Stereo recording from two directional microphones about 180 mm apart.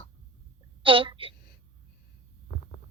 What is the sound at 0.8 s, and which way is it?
Speech, 30° right (ahead or behind).